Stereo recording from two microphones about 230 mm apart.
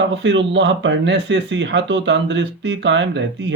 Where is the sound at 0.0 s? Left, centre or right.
Right.